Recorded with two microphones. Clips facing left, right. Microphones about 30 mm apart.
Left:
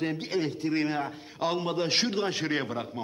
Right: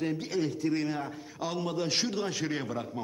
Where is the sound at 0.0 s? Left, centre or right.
Left.